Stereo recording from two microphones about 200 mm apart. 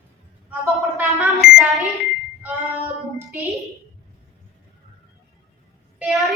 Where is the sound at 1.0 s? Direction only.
5° right (ahead or behind).